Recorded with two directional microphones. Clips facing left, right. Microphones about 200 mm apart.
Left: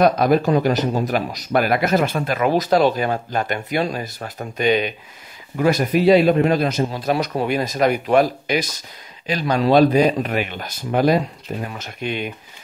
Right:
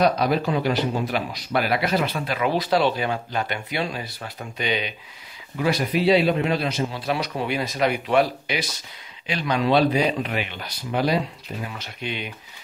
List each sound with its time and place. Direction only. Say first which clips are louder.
0.0 s speech: left 5 dB; 50° left (ahead or behind)